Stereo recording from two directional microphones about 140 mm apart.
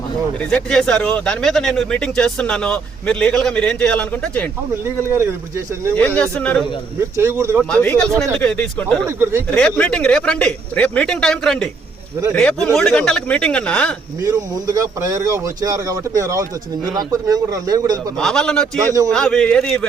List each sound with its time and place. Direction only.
0.5 s speech: 5° left (ahead or behind)
6.0 s speech: 10° left (ahead or behind)
7.0 s speech: 20° right (ahead or behind)
7.7 s speech: 5° left (ahead or behind)
9.0 s speech: 15° right (ahead or behind)
9.6 s speech: 5° left (ahead or behind)
12.7 s speech: 5° left (ahead or behind)
14.2 s speech: 25° right (ahead or behind)
18.2 s a man's voice: 5° left (ahead or behind)